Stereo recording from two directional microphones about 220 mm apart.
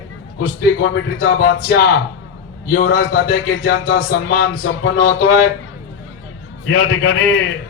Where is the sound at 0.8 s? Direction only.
50° left (ahead or behind).